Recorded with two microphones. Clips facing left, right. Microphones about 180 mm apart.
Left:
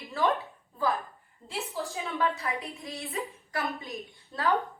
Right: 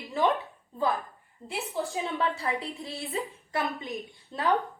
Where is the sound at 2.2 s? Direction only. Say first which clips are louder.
Left 2 dB; 30° right (ahead or behind).